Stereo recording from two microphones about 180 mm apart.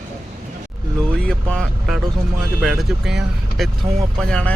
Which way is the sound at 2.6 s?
Centre (ahead or behind).